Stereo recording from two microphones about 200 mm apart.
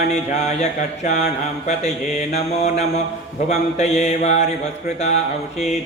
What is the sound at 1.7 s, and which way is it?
Speech, 35° left (ahead or behind).